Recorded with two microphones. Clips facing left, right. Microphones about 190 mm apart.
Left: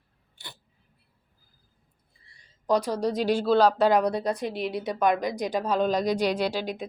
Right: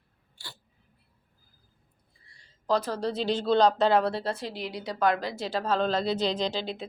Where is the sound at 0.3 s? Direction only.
20° left (ahead or behind).